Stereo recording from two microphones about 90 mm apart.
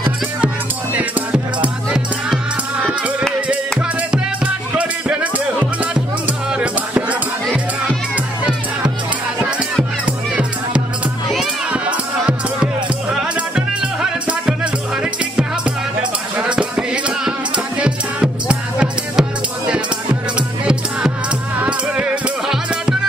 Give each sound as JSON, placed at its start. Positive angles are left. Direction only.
{"t": 0.9, "sound": "music", "side_deg": -15}
{"t": 4.7, "sound": "music", "side_deg": -15}
{"t": 14.2, "sound": "music", "side_deg": -15}
{"t": 20.3, "sound": "music", "side_deg": -10}